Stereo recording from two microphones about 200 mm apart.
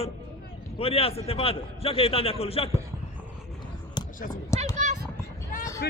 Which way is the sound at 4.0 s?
20° left (ahead or behind).